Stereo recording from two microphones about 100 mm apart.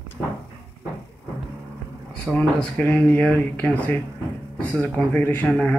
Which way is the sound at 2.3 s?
10° left (ahead or behind).